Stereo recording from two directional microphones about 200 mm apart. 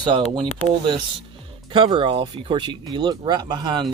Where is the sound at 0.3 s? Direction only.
20° right (ahead or behind).